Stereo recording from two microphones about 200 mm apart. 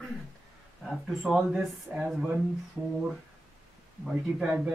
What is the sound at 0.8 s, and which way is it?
Speech, centre (ahead or behind).